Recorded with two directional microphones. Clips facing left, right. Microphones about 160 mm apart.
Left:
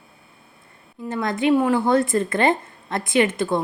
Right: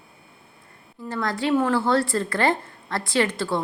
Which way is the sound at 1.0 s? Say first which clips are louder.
Left 4 dB; 20° left (ahead or behind).